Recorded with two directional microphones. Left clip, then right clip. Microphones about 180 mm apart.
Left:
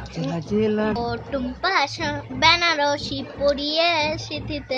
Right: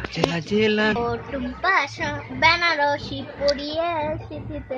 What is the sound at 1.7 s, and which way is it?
Speech, 45° left (ahead or behind).